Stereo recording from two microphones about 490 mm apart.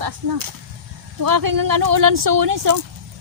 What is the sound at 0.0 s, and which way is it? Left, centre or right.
Speech, right.